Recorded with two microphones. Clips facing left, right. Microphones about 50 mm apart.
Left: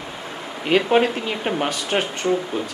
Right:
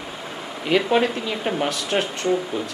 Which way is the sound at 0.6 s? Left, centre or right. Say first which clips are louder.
Left 2 dB; centre.